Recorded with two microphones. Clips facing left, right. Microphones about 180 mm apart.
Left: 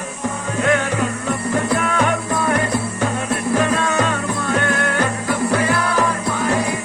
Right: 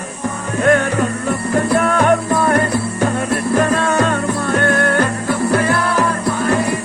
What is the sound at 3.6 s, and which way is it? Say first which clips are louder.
Music: right 3 dB; 50° right (ahead or behind).